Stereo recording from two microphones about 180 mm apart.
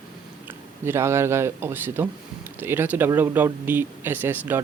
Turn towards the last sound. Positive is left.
turn(degrees=-10)  # may be behind; listen again after turning